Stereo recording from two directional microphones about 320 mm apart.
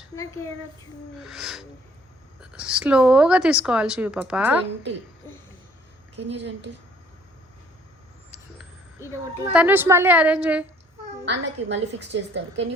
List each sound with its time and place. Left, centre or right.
1.2 s a woman's voice: centre
6.1 s a woman's voice: right
8.3 s vehicle: centre
9.4 s a woman's voice: centre
11.3 s a woman's voice: right